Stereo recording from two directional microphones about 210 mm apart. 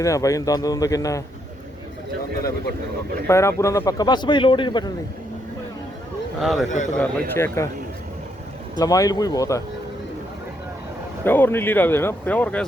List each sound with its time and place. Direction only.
0.0 s speech: 15° left (ahead or behind)
3.2 s a man's voice: 15° left (ahead or behind)
6.4 s a man's voice: centre (ahead or behind)
6.7 s a man's voice: 35° left (ahead or behind)
6.9 s speech: 10° left (ahead or behind)
8.8 s speech: 15° left (ahead or behind)
11.2 s speech: 10° left (ahead or behind)